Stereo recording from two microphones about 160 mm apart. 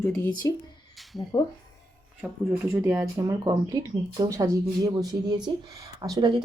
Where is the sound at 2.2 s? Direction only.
10° right (ahead or behind).